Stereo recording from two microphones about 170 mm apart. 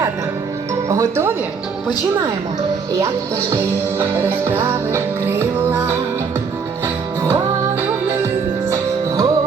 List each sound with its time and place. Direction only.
0.9 s music: 15° right (ahead or behind)
3.5 s music: 15° right (ahead or behind)
8.7 s music: 20° right (ahead or behind)